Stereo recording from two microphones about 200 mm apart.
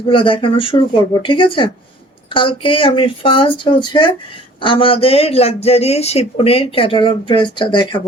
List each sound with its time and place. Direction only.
0.1 s speech: 25° left (ahead or behind)